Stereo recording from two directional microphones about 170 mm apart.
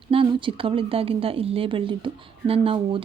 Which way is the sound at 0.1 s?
30° right (ahead or behind).